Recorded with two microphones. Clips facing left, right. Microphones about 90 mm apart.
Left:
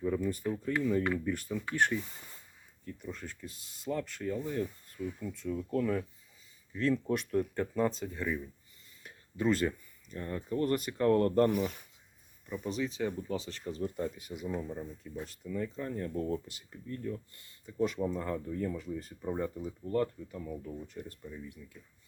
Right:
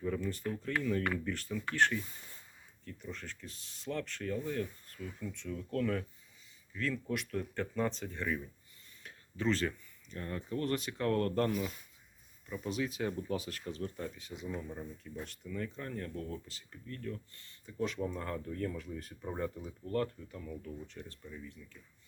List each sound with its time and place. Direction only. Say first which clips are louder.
0.0 s speech: left 4 dB; 10° left (ahead or behind)
6.7 s speech: left 6 dB; 25° left (ahead or behind)
7.5 s speech: left 4 dB; 15° left (ahead or behind)
10.7 s speech: left 4 dB; 5° left (ahead or behind)
10.9 s speech: left 7 dB; 20° left (ahead or behind)
12.5 s speech: left 2 dB; centre (ahead or behind)
13.3 s speech: left 1 dB; 15° right (ahead or behind)
13.8 s speech: left 9 dB; 10° left (ahead or behind)
17.8 s speech: left 4 dB; 5° left (ahead or behind)
19.8 s speech: left 3 dB; 15° left (ahead or behind)
20.8 s speech: left 4 dB; 10° left (ahead or behind)